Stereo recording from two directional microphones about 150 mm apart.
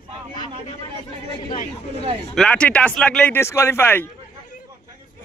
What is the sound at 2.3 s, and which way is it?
Speech, 5° left (ahead or behind).